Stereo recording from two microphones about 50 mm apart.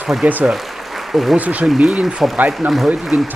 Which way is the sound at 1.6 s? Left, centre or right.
Centre.